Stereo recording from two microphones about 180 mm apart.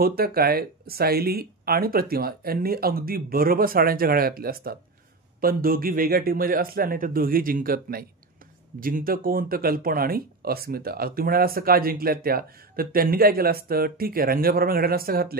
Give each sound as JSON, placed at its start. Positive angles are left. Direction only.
{"t": 0.0, "sound": "speech", "side_deg": -55}